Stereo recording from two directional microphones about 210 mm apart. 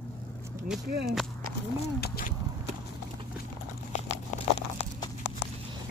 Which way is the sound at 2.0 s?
50° left (ahead or behind).